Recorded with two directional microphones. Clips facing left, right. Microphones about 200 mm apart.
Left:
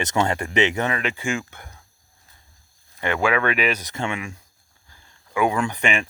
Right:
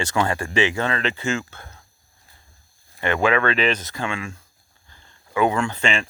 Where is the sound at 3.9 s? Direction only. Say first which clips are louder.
Even; 20° left (ahead or behind).